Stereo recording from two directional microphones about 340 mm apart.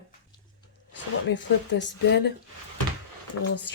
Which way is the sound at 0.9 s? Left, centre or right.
Left.